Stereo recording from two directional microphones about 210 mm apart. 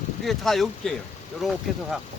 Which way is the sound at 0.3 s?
Centre (ahead or behind).